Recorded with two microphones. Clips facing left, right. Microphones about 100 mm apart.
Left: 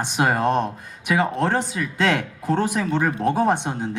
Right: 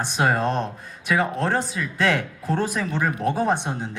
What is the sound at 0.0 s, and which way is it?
Speech, 20° left (ahead or behind).